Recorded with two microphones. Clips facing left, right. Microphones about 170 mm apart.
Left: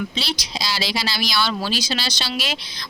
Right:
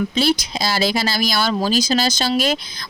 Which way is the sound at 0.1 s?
50° right (ahead or behind).